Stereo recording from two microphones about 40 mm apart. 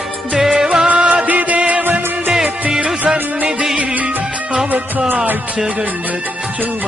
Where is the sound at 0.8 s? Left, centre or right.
Right.